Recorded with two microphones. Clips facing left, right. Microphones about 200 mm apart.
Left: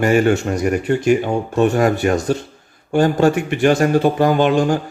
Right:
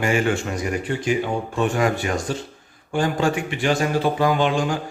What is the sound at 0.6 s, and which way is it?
Speech, 60° left (ahead or behind).